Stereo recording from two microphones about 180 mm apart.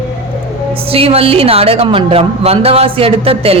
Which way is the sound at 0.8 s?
30° right (ahead or behind).